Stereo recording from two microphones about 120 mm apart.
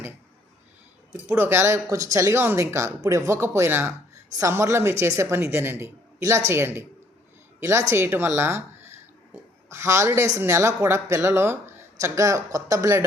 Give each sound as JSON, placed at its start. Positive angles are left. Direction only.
{"t": 1.3, "sound": "speech", "side_deg": -20}
{"t": 8.4, "sound": "a sound", "side_deg": -20}
{"t": 10.3, "sound": "speech", "side_deg": -25}